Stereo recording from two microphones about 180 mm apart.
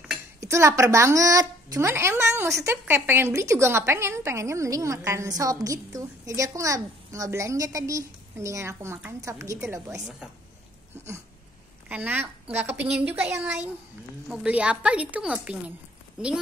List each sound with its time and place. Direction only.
0.4 s speech: 15° right (ahead or behind)
11.9 s speech: 10° right (ahead or behind)